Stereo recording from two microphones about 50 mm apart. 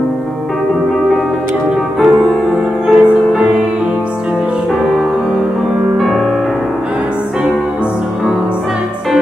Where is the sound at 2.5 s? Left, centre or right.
Centre.